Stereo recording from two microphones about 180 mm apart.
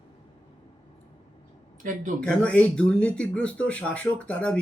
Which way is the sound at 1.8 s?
45° right (ahead or behind).